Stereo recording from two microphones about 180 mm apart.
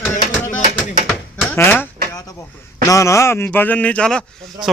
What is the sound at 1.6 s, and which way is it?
Speech, 10° left (ahead or behind).